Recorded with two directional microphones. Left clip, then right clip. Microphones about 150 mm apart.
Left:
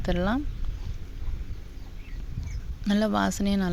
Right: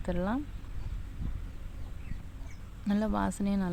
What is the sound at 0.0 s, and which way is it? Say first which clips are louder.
Speech: left 6 dB; 20° left (ahead or behind).